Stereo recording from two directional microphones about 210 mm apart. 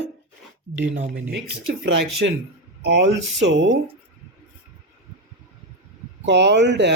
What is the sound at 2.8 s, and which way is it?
Speech, 55° right (ahead or behind).